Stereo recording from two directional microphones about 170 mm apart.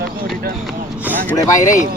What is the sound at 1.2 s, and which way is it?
Speech, 20° left (ahead or behind).